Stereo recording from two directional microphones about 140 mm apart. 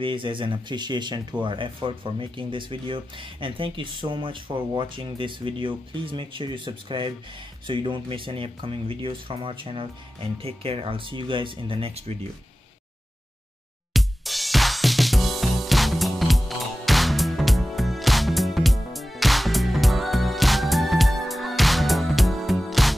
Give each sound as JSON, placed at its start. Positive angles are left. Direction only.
{"t": 0.0, "sound": "speech", "side_deg": -35}
{"t": 13.9, "sound": "music", "side_deg": 0}